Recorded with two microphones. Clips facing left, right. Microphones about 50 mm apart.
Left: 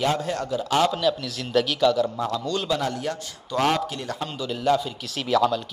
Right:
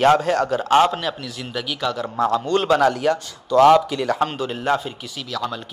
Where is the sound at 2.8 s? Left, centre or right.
Right.